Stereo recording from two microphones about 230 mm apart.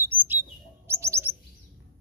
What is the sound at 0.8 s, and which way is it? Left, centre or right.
Bird, centre.